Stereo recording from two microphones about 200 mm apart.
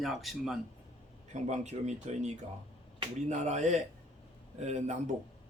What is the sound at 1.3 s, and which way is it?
Speech, 35° right (ahead or behind).